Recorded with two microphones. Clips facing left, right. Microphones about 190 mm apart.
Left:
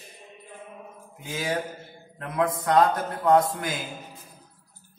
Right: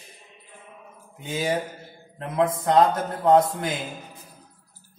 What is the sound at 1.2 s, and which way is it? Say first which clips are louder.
A man's voice: right 3 dB; 25° right (ahead or behind).